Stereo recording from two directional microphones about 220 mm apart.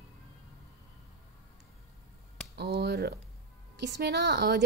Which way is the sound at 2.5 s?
45° right (ahead or behind).